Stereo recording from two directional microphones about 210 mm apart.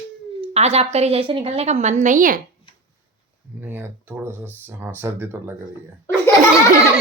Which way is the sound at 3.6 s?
10° right (ahead or behind).